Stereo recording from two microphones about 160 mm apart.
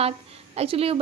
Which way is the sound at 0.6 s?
35° right (ahead or behind).